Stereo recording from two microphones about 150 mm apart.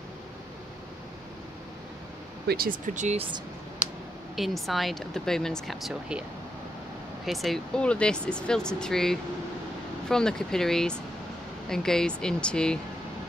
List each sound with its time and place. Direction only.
2.4 s speech: 90° right
2.9 s speech: 55° right (ahead or behind)
4.4 s speech: centre (ahead or behind)
7.2 s speech: centre (ahead or behind)